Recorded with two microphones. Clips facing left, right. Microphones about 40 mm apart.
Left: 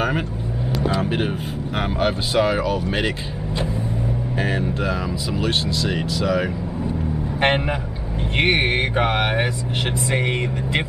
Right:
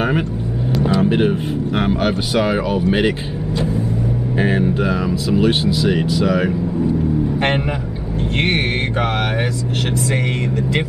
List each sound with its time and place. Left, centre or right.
1.0 s speech: centre
4.4 s speech: centre
7.3 s a man's voice: centre